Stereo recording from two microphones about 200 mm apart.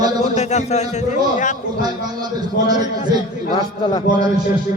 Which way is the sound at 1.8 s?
20° right (ahead or behind).